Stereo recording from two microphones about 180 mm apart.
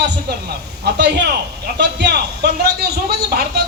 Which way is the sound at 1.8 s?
70° right (ahead or behind).